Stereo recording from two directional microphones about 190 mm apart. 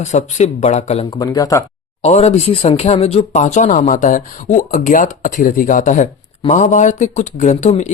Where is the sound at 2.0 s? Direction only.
35° left (ahead or behind).